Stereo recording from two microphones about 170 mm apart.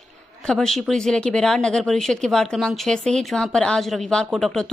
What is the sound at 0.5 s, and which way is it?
A woman's voice, centre (ahead or behind).